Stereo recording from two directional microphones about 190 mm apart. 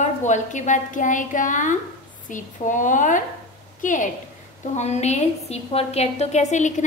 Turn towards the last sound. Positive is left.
turn(degrees=40)  # may be behind; listen again after turning